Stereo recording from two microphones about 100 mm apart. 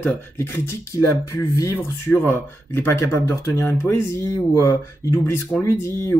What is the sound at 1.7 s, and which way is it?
Speech, 20° left (ahead or behind).